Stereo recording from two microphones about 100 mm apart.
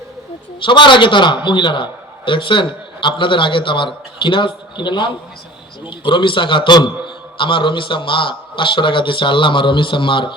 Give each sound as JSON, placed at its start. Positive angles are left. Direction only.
{"t": 0.6, "sound": "a man's voice", "side_deg": 55}